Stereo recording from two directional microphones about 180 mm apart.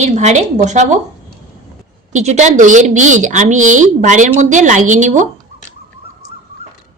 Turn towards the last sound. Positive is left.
turn(degrees=-40)  # may be behind; listen again after turning